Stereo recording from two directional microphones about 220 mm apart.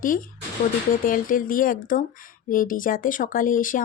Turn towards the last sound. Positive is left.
turn(degrees=40)  # may be behind; listen again after turning